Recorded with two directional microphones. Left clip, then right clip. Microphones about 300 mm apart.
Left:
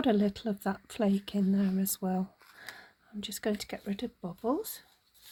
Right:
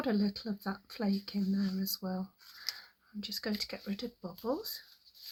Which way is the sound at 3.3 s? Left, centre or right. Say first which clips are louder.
Left 3 dB; left.